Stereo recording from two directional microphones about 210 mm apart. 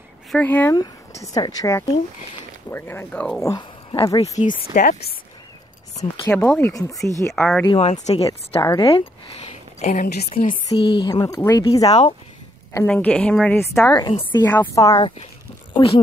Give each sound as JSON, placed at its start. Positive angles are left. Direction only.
{"t": 0.3, "sound": "a woman's voice", "side_deg": 10}
{"t": 4.7, "sound": "speech", "side_deg": 40}
{"t": 5.9, "sound": "a woman's voice", "side_deg": 10}
{"t": 9.8, "sound": "a woman's voice", "side_deg": 35}
{"t": 10.3, "sound": "speech", "side_deg": 25}
{"t": 12.7, "sound": "a woman's voice", "side_deg": 5}
{"t": 14.4, "sound": "a woman's voice", "side_deg": 10}